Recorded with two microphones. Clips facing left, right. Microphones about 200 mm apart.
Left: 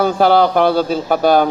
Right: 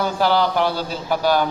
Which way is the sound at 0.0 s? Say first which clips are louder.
Left 6 dB; 55° left (ahead or behind).